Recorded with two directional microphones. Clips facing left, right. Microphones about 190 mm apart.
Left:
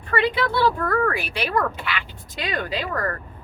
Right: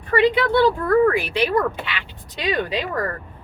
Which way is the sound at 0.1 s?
15° right (ahead or behind).